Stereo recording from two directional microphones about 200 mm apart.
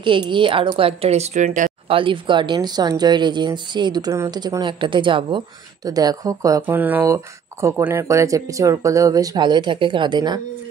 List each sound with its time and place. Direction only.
0.0 s a woman's voice: 25° right (ahead or behind)
1.9 s a woman's voice: 25° right (ahead or behind)